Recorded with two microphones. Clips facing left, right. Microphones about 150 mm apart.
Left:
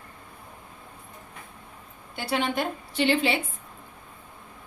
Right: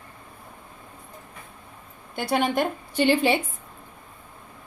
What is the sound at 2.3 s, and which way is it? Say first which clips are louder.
A woman's voice: right 4 dB; 45° right (ahead or behind).